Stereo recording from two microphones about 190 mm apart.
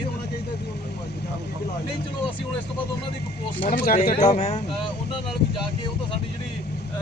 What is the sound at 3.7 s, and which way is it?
Speech, 50° left (ahead or behind).